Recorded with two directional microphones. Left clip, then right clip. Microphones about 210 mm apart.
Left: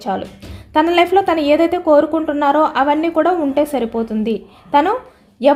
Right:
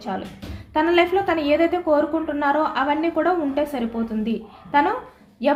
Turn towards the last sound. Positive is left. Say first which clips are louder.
# left 8 dB
turn(degrees=50)  # may be behind; listen again after turning